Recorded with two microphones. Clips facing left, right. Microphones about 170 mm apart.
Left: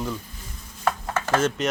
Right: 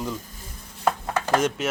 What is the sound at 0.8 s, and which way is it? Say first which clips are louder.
Chopping: right 1 dB; 15° right (ahead or behind).